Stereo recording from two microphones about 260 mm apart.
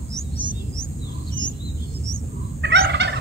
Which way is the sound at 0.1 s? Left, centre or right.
Centre.